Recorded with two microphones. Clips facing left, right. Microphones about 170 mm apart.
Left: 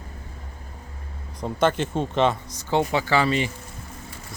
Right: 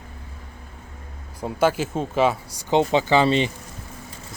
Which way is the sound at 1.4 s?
5° right (ahead or behind).